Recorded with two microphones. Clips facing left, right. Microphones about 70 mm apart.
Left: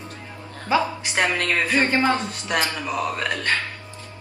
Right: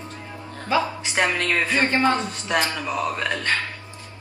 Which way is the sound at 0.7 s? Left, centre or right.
Centre.